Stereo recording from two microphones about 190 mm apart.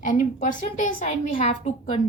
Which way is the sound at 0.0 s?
45° left (ahead or behind).